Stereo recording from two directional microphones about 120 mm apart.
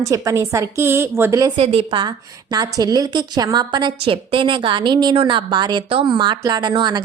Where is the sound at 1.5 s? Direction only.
50° right (ahead or behind).